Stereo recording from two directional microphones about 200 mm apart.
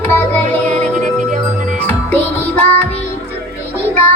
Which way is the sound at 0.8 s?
40° right (ahead or behind).